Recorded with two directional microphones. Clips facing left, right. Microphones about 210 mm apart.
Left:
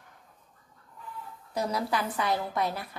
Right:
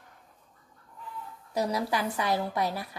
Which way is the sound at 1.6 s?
15° right (ahead or behind).